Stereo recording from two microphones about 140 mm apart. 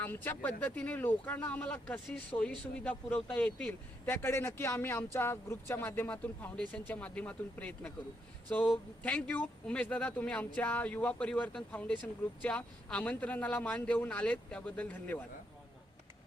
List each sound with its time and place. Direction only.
0.0 s speech: 15° left (ahead or behind)